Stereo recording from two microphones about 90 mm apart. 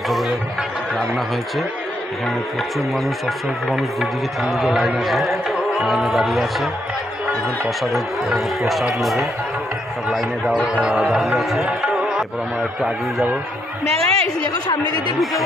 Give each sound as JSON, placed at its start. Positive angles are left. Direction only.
{"t": 0.9, "sound": "speech", "side_deg": 0}
{"t": 2.9, "sound": "speech", "side_deg": 0}
{"t": 7.8, "sound": "speech", "side_deg": 0}
{"t": 13.9, "sound": "a woman's voice", "side_deg": -90}